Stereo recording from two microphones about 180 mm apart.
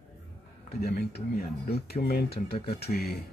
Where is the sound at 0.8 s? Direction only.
60° left (ahead or behind).